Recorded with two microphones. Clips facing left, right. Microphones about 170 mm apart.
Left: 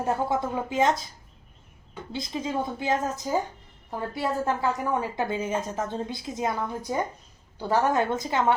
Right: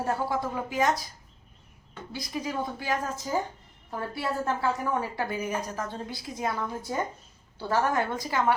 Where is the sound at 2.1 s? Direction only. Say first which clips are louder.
Left 3 dB; 25° left (ahead or behind).